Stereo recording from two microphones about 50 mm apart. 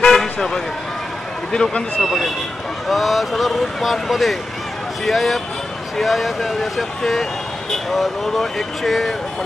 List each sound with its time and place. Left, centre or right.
0.0 s vehicle: centre
1.5 s speech: centre
2.0 s speech: centre